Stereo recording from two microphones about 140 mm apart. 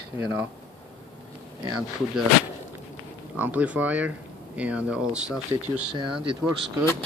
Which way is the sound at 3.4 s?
10° right (ahead or behind).